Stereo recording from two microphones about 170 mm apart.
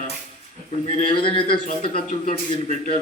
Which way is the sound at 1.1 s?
30° left (ahead or behind).